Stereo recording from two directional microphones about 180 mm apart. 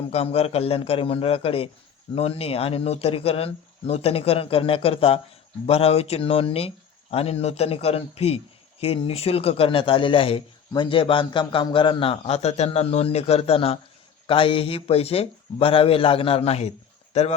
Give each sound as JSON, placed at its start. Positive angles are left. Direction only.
{"t": 0.1, "sound": "a man's voice", "side_deg": 35}